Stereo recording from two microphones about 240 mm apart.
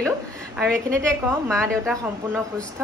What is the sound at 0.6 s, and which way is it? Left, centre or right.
A woman's voice, centre.